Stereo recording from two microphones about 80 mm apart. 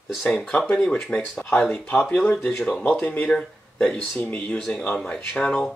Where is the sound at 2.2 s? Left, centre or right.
Centre.